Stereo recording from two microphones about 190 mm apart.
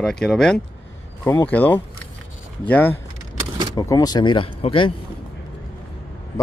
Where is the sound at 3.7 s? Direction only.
20° left (ahead or behind).